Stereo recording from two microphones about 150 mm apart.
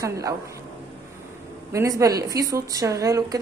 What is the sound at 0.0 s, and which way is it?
Speech, 20° right (ahead or behind).